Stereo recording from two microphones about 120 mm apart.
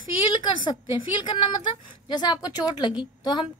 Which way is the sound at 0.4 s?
40° left (ahead or behind).